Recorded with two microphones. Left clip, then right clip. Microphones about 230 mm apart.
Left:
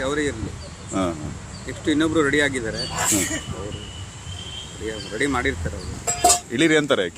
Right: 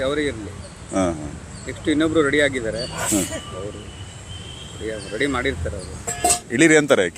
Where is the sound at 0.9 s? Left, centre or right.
Centre.